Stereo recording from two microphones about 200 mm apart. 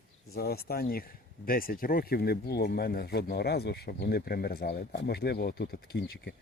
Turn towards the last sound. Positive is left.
turn(degrees=55)  # may be behind; listen again after turning